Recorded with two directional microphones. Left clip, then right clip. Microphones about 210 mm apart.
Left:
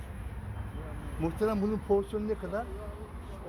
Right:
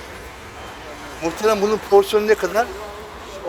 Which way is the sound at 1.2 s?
10° right (ahead or behind).